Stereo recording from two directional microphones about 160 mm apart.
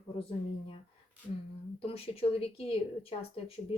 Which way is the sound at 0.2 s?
35° left (ahead or behind).